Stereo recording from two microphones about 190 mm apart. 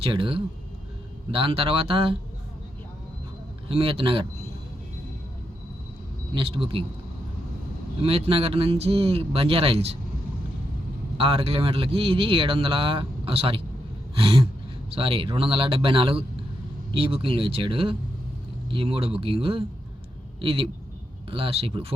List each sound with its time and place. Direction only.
0.0 s speech: 25° right (ahead or behind)
3.7 s speech: 30° right (ahead or behind)
6.3 s speech: 30° right (ahead or behind)
8.0 s speech: 30° right (ahead or behind)
11.2 s speech: 30° right (ahead or behind)